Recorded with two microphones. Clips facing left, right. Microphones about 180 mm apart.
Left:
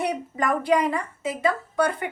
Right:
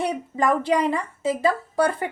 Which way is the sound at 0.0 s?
25° right (ahead or behind).